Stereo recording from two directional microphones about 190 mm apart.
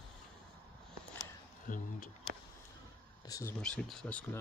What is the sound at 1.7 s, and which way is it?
Speech, 45° left (ahead or behind).